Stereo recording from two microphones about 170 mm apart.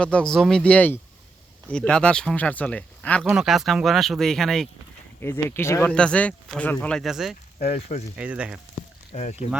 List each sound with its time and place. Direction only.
0.0 s speech: 5° left (ahead or behind)
3.2 s speech: 5° right (ahead or behind)
5.2 s speech: 15° left (ahead or behind); by 7.3 s centre (ahead or behind)
7.7 s speech: 40° left (ahead or behind)
8.1 s speech: 5° right (ahead or behind)
9.1 s speech: 40° left (ahead or behind)